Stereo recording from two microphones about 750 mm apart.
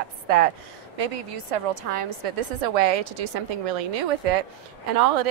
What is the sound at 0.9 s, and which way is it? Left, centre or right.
A woman's voice, right.